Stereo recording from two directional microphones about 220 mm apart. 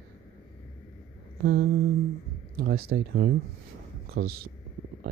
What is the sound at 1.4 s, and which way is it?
Speech, 45° right (ahead or behind).